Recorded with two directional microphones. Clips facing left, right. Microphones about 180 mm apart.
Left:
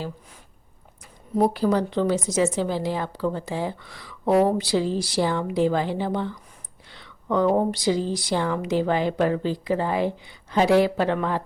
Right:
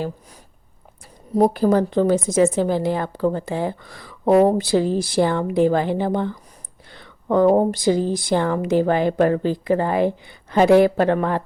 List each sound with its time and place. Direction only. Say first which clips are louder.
1.3 s a woman's voice: right 4 dB; 45° right (ahead or behind)